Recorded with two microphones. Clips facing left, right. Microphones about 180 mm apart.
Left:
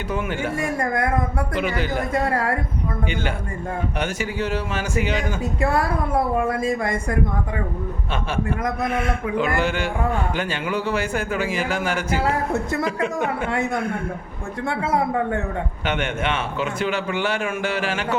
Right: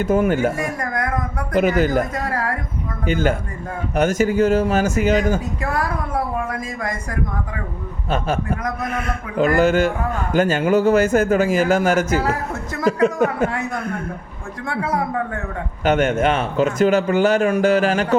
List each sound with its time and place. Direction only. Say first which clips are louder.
0.0 s a man's voice: right 8 dB; 45° right (ahead or behind)
0.5 s speech: left 1 dB; 25° left (ahead or behind)
1.5 s a man's voice: right 9 dB; 45° right (ahead or behind)
2.1 s speech: left 2 dB; 25° left (ahead or behind)
3.1 s a man's voice: right 6 dB; 45° right (ahead or behind)
5.6 s speech: left 2 dB; 25° left (ahead or behind)
8.1 s a man's voice: right 4 dB; 40° right (ahead or behind)
14.7 s speech: even; 25° left (ahead or behind)
15.8 s a man's voice: right 10 dB; 40° right (ahead or behind)